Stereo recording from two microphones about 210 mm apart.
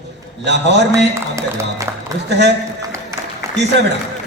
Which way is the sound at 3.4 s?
15° right (ahead or behind).